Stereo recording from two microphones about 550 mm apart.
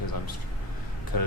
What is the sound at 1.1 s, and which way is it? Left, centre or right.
Speech, left.